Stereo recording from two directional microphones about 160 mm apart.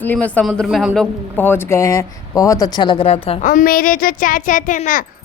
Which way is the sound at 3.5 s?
60° left (ahead or behind).